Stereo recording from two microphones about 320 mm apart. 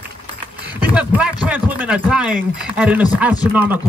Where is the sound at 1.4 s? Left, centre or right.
Centre.